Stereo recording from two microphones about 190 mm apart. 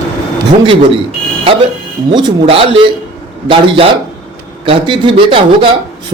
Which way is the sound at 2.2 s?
25° right (ahead or behind).